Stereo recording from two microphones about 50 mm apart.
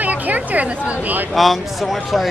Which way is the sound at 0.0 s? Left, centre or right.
Right.